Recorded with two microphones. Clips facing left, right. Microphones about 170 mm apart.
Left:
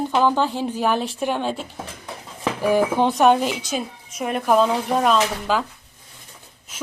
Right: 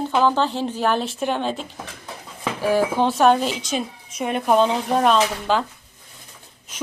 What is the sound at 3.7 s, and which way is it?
A woman's voice, centre (ahead or behind).